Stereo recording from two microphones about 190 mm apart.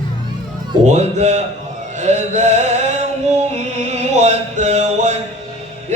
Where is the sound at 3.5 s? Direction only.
35° right (ahead or behind).